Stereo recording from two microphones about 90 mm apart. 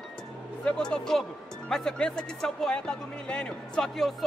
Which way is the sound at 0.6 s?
10° left (ahead or behind).